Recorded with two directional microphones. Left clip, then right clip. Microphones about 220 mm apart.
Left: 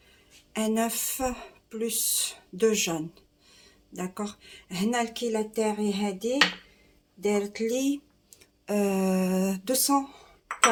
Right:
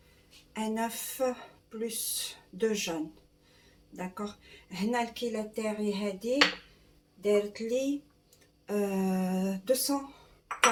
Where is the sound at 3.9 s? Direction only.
45° left (ahead or behind).